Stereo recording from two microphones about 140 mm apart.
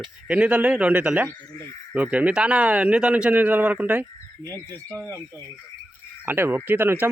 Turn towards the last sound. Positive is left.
turn(degrees=-15)  # may be behind; listen again after turning